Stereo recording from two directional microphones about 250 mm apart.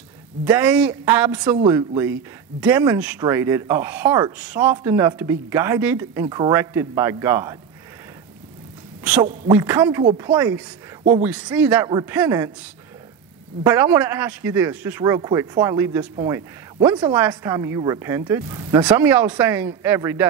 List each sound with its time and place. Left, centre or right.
0.5 s speech: centre
9.0 s speech: centre
13.7 s speech: centre